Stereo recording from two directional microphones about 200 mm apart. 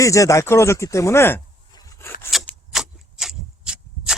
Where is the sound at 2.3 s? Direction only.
Centre (ahead or behind).